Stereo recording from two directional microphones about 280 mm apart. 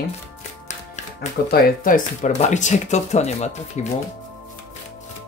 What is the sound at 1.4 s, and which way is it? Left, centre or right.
Speech, left.